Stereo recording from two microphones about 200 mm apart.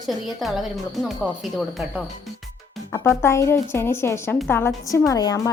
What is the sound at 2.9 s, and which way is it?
A woman's voice, 15° left (ahead or behind).